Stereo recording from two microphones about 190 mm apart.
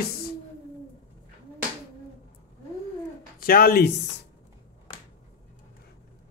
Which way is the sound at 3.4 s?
50° left (ahead or behind).